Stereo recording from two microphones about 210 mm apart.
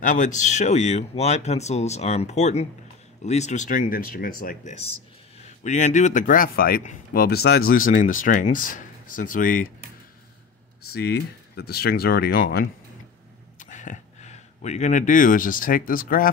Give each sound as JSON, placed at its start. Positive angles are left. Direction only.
{"t": 0.0, "sound": "speech", "side_deg": 35}
{"t": 11.0, "sound": "speech", "side_deg": 50}
{"t": 13.6, "sound": "speech", "side_deg": 35}